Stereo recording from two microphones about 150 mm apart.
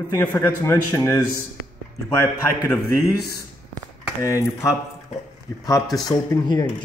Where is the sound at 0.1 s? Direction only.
15° left (ahead or behind).